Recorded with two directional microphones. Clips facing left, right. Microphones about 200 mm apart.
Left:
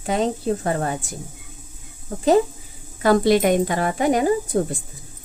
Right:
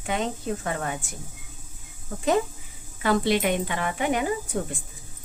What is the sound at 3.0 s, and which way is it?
Speech, 40° left (ahead or behind).